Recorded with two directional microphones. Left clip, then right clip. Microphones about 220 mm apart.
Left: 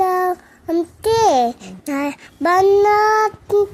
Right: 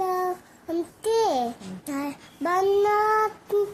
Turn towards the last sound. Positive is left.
turn(degrees=45)  # may be behind; listen again after turning